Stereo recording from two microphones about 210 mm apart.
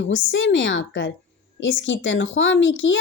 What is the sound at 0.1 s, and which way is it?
Speech, 65° left (ahead or behind).